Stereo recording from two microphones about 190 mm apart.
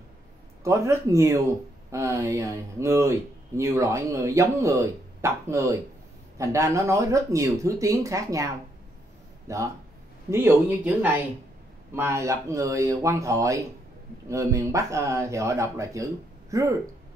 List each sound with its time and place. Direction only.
0.7 s speech: 15° right (ahead or behind)
9.5 s speech: 15° right (ahead or behind)
11.0 s speech: 10° right (ahead or behind)